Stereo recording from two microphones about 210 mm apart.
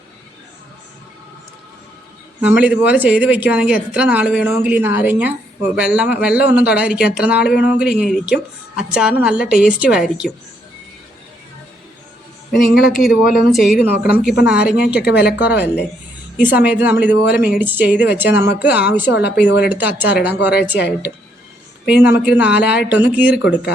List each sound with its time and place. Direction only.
2.4 s a woman's voice: 5° right (ahead or behind)
12.7 s a woman's voice: centre (ahead or behind)
19.1 s speech: 55° left (ahead or behind)
19.6 s speech: 10° right (ahead or behind)
21.8 s speech: 5° right (ahead or behind)
23.4 s speech: 50° left (ahead or behind)